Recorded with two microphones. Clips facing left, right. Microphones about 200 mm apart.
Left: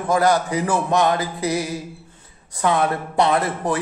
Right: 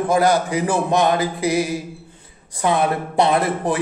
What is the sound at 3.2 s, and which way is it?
Speech, 25° right (ahead or behind).